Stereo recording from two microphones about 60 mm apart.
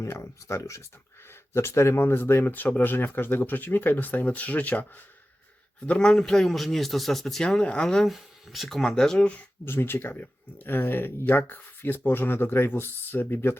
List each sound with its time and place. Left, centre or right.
0.0 s speech: left
5.8 s speech: centre
7.4 s speech: centre
8.0 s speech: centre
9.1 s speech: left
9.6 s speech: left